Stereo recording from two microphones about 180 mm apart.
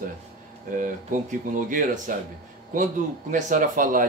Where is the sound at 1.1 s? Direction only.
45° right (ahead or behind).